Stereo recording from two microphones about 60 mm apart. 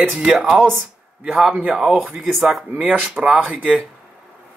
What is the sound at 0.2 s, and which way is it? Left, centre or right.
Speech, centre.